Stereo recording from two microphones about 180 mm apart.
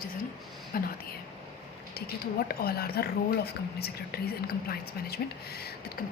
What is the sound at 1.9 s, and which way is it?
A woman's voice, 60° left (ahead or behind).